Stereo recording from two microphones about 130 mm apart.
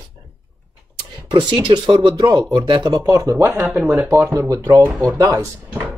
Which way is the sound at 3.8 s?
5° right (ahead or behind).